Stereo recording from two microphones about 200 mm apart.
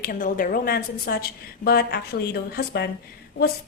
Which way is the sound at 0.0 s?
45° left (ahead or behind).